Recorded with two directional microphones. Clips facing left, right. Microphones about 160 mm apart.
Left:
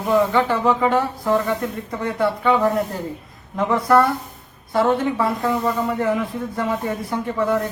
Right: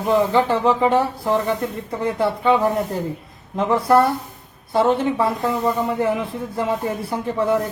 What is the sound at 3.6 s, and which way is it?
Speech, 30° right (ahead or behind).